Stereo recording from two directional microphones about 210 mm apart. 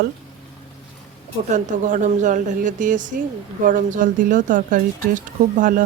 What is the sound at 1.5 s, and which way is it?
Speech, 35° right (ahead or behind).